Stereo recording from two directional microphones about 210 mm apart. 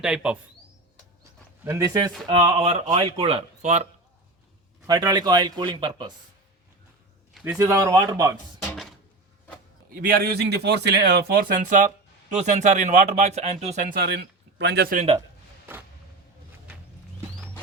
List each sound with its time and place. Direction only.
0.0 s speech: 5° right (ahead or behind)
1.6 s speech: 15° right (ahead or behind); by 3.8 s 35° right (ahead or behind)
4.9 s speech: 20° right (ahead or behind)
7.3 s a man's voice: centre (ahead or behind)
7.6 s speech: 15° right (ahead or behind)
8.5 s a sound: centre (ahead or behind)
9.9 s speech: 45° right (ahead or behind)
14.6 s speech: 55° right (ahead or behind)
14.9 s speech: 25° right (ahead or behind)